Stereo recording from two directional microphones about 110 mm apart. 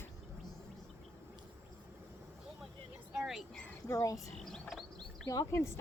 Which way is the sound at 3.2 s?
Centre (ahead or behind).